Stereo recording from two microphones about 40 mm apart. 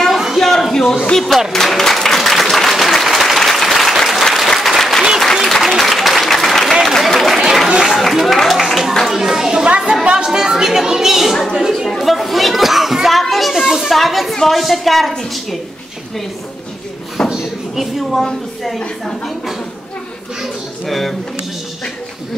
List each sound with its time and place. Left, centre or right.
0.4 s a sound: centre
1.1 s speech: centre
1.5 s applause: centre
6.8 s a sound: centre
9.0 s children playing: centre
10.1 s a woman's voice: centre
13.2 s children playing: centre
13.9 s a woman's voice: centre
17.2 s a sound: left
17.7 s a woman's voice: centre
20.8 s a woman's voice: centre